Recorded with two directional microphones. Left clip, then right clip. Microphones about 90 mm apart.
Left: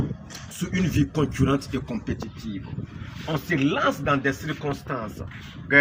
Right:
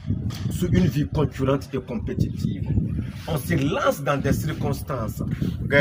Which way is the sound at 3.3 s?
40° right (ahead or behind).